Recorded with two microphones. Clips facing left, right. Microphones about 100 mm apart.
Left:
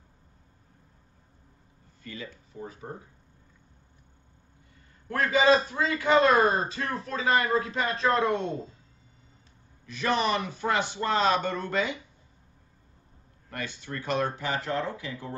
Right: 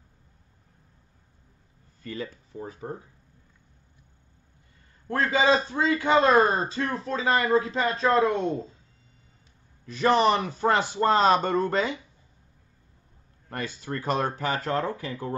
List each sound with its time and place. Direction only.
2.0 s speech: 40° right (ahead or behind)
5.1 s a man's voice: 30° right (ahead or behind)
9.8 s speech: 35° right (ahead or behind)
13.5 s speech: 40° right (ahead or behind)